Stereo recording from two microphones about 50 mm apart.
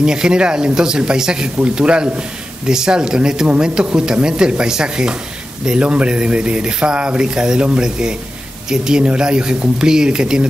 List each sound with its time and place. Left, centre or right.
0.0 s speech: centre